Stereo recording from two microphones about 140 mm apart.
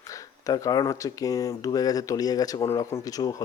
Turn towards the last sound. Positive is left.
turn(degrees=25)  # may be behind; listen again after turning